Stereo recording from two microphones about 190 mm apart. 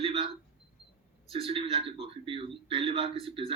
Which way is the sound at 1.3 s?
30° right (ahead or behind).